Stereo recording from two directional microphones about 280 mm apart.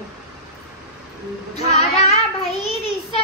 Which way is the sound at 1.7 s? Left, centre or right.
Left.